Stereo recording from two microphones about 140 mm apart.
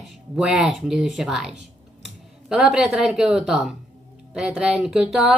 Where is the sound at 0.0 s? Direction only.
Centre (ahead or behind).